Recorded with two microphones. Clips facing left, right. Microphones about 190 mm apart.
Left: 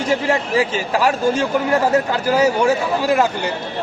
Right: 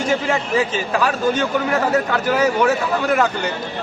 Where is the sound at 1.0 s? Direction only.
25° left (ahead or behind).